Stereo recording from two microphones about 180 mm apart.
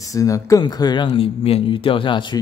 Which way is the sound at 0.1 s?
20° left (ahead or behind).